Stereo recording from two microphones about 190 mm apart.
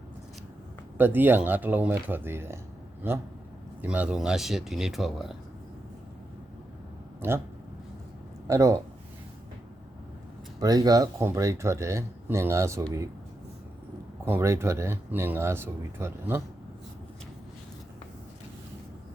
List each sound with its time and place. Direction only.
0.9 s speech: 10° right (ahead or behind)
3.8 s speech: 5° right (ahead or behind)
7.2 s speech: 10° right (ahead or behind)
8.4 s speech: 15° right (ahead or behind)
10.6 s speech: 20° right (ahead or behind)
14.3 s speech: 15° right (ahead or behind)